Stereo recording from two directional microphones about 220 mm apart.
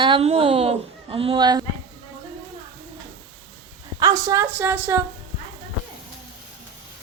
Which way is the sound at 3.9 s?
15° right (ahead or behind).